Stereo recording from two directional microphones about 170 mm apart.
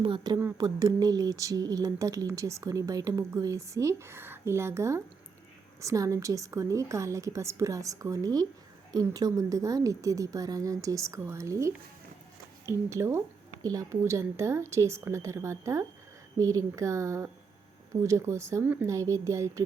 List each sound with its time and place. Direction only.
0.0 s a woman's voice: 30° right (ahead or behind)